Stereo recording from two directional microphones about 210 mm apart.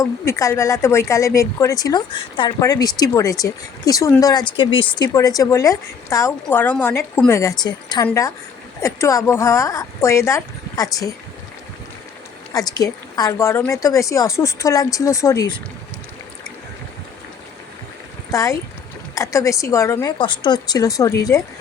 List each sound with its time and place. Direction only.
0.0 s speech: 15° left (ahead or behind)
12.5 s speech: 15° left (ahead or behind)
18.3 s speech: 15° left (ahead or behind)